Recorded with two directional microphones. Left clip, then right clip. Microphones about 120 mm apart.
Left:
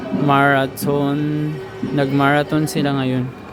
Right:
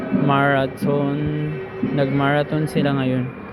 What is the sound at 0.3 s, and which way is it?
Speech, 65° left (ahead or behind).